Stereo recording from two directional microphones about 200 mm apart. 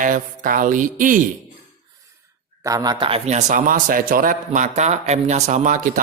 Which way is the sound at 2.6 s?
20° right (ahead or behind).